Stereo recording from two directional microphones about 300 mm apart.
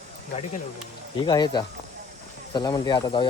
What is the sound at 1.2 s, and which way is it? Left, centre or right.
Speech, centre.